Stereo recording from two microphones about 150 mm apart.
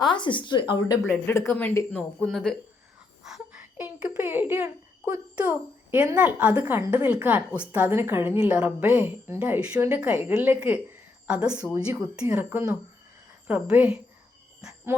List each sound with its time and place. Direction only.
0.0 s speech: 30° left (ahead or behind)
1.0 s a child's voice: 15° left (ahead or behind); by 14.0 s 10° right (ahead or behind)